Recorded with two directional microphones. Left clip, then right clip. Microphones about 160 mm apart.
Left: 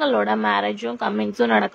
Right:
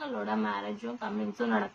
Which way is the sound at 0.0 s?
45° left (ahead or behind).